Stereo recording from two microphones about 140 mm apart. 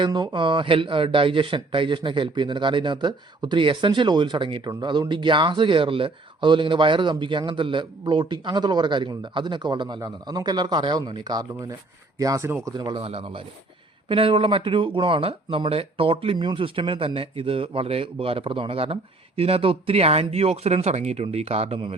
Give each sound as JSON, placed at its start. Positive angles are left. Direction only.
{"t": 0.0, "sound": "a man's voice", "side_deg": -30}
{"t": 12.7, "sound": "speech", "side_deg": -35}